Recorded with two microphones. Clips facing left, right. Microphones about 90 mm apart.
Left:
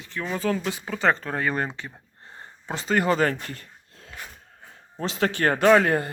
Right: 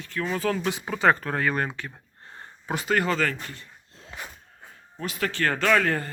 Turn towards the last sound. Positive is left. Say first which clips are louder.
# left 5 dB
turn(degrees=25)  # may be behind; listen again after turning